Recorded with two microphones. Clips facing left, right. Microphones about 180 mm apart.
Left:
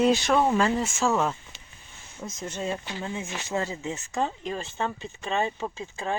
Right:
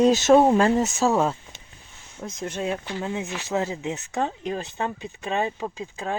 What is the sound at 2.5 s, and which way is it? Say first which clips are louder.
Speech: right 3 dB; 10° right (ahead or behind).